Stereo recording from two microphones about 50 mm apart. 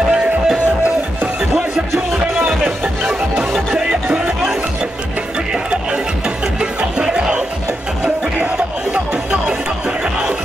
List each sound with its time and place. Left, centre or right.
0.1 s music: centre
2.3 s music: right
5.5 s music: centre